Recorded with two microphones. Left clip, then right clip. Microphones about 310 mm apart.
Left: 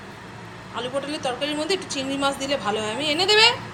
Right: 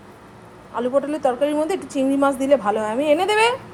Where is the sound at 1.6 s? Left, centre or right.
Right.